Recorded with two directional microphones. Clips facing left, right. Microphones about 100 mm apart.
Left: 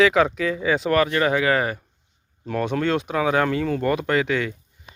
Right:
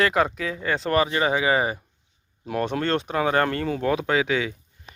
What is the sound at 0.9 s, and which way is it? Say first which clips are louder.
Speech: even; 10° right (ahead or behind).